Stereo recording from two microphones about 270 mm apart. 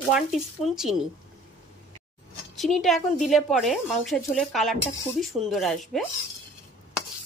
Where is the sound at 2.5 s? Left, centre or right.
Centre.